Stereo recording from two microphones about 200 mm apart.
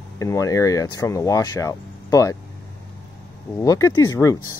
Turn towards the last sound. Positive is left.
turn(degrees=15)  # may be behind; listen again after turning